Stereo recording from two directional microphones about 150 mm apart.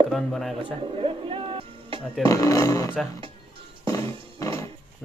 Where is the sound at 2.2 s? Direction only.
20° left (ahead or behind).